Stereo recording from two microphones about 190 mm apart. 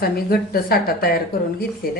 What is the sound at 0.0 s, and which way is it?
Speech, 55° left (ahead or behind).